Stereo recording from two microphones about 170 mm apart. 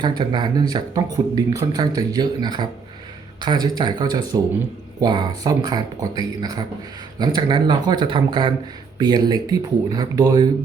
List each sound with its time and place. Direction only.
0.0 s speech: 25° right (ahead or behind)